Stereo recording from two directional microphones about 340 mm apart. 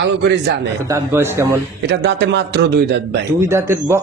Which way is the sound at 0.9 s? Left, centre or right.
Centre.